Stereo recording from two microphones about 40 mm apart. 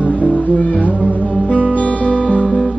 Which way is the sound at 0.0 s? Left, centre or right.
Left.